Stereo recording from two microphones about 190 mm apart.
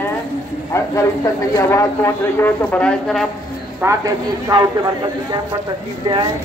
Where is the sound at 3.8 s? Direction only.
15° right (ahead or behind).